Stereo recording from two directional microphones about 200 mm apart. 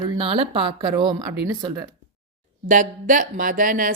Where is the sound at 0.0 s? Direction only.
25° right (ahead or behind).